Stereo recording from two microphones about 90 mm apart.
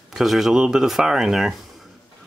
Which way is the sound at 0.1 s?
Centre (ahead or behind).